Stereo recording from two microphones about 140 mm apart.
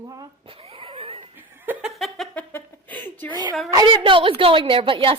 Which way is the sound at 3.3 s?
30° right (ahead or behind).